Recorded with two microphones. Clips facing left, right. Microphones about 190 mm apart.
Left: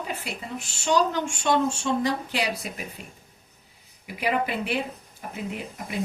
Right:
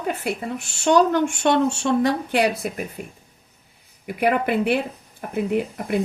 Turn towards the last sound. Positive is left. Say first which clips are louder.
# right 10 dB
turn(degrees=-60)  # may be behind; listen again after turning